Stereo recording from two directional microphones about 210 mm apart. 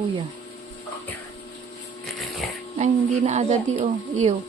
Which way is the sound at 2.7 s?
35° right (ahead or behind).